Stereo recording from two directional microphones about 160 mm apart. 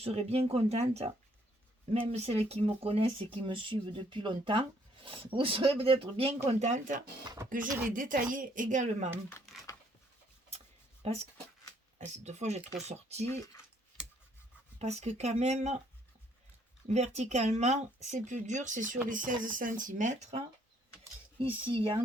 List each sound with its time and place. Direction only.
0.0 s speech: 40° right (ahead or behind)
11.0 s speech: 40° right (ahead or behind)
14.8 s speech: 45° right (ahead or behind)
16.9 s speech: 45° right (ahead or behind)
21.3 s speech: 35° right (ahead or behind)